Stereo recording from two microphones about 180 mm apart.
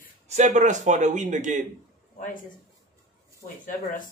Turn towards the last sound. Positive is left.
turn(degrees=50)  # may be behind; listen again after turning